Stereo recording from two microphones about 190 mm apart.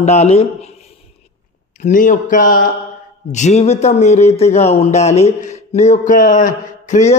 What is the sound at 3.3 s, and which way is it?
Speech, 35° left (ahead or behind).